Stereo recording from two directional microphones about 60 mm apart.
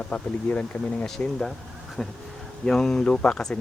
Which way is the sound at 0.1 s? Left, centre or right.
Centre.